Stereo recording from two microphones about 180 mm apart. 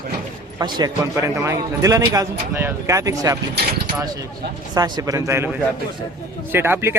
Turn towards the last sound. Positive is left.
turn(degrees=-10)  # may be behind; listen again after turning